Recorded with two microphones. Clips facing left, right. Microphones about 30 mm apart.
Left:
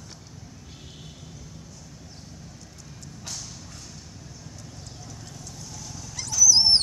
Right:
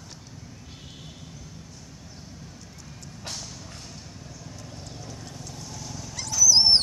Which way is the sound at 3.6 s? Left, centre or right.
Right.